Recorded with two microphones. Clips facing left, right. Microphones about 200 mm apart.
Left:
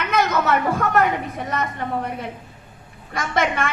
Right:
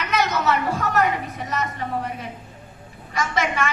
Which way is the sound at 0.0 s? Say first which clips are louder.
Left 2 dB; 55° left (ahead or behind).